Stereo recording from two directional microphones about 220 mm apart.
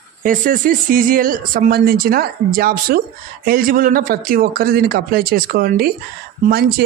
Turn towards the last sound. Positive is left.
turn(degrees=-45)  # may be behind; listen again after turning